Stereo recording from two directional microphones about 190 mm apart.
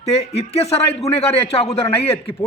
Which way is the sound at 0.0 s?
35° left (ahead or behind).